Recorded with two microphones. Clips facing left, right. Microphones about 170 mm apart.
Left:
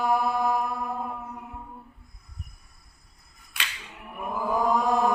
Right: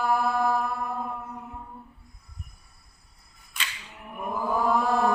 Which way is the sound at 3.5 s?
65° left (ahead or behind).